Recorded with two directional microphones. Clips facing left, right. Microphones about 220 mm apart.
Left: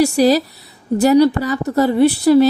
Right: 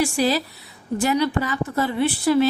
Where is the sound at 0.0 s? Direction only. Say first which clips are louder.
Left 8 dB; 40° left (ahead or behind).